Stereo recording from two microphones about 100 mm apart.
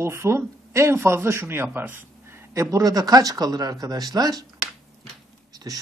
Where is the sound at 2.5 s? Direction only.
35° right (ahead or behind).